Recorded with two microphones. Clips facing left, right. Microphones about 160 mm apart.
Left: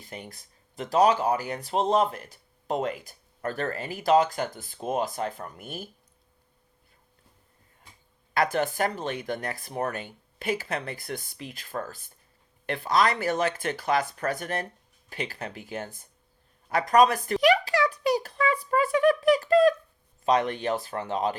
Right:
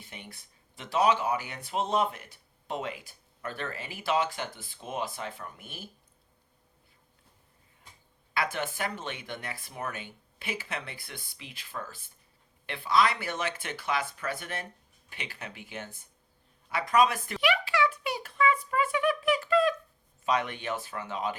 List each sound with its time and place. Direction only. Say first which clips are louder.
0.0 s speech: left 6 dB; 40° left (ahead or behind)
8.3 s speech: left 7 dB; 40° left (ahead or behind)
16.6 s a sound: left 5 dB; 40° left (ahead or behind)
20.2 s speech: left 6 dB; 35° left (ahead or behind)